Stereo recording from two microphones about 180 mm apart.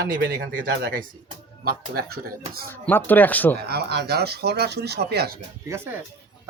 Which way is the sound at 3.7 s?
65° right (ahead or behind).